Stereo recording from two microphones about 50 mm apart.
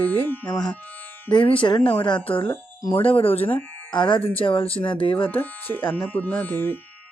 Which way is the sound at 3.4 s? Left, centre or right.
Left.